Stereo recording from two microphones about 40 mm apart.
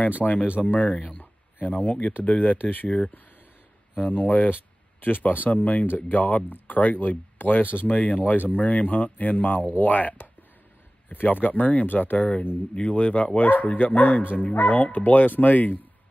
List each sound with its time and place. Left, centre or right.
0.2 s speech: left
1.2 s a sound: left
2.2 s speech: left